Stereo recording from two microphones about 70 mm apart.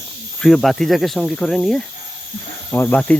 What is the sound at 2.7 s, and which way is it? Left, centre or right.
Speech, left.